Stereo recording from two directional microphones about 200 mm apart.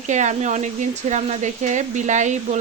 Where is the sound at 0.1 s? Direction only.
35° right (ahead or behind).